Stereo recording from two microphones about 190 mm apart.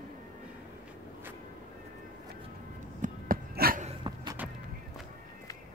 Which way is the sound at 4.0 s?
25° right (ahead or behind).